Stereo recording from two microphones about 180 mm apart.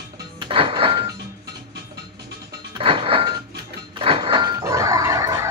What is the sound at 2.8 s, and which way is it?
Music, 30° right (ahead or behind).